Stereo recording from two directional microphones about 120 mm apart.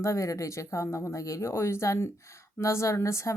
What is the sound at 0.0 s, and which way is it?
Speech, 25° left (ahead or behind).